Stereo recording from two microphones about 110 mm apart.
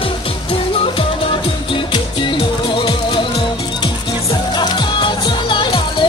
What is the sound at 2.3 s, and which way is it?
Music, 50° left (ahead or behind).